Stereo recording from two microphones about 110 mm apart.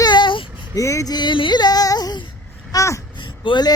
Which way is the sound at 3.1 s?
50° left (ahead or behind).